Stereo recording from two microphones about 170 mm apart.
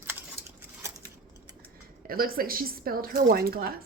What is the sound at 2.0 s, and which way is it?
Speech, 60° right (ahead or behind).